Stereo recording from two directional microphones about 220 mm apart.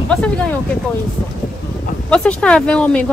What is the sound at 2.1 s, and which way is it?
Speech, 5° left (ahead or behind).